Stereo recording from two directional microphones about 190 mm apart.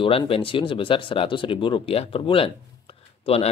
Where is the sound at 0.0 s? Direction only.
30° left (ahead or behind).